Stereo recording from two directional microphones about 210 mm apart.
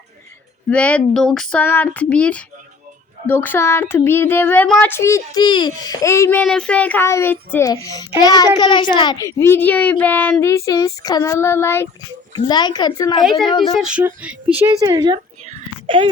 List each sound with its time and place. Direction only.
0.7 s speech: 5° left (ahead or behind)
3.2 s child singing: 10° left (ahead or behind)
12.3 s a woman's voice: 20° left (ahead or behind)
13.2 s speech: centre (ahead or behind); by 15.2 s 20° right (ahead or behind)
15.4 s a sound: 25° right (ahead or behind)